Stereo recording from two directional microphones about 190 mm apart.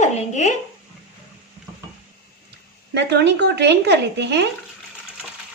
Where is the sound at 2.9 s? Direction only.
65° right (ahead or behind).